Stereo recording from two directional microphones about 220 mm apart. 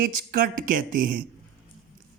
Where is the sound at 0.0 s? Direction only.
40° right (ahead or behind).